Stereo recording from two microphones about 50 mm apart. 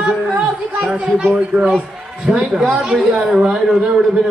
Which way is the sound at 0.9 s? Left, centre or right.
Right.